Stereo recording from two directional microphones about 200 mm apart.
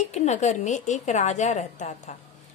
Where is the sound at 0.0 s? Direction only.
35° left (ahead or behind).